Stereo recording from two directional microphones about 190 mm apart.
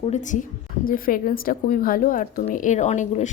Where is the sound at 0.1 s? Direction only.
40° left (ahead or behind).